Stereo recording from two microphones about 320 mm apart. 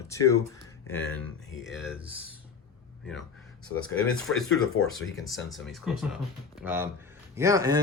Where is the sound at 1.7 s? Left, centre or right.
Centre.